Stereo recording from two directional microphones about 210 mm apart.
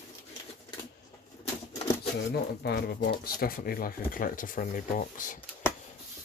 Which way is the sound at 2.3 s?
50° left (ahead or behind).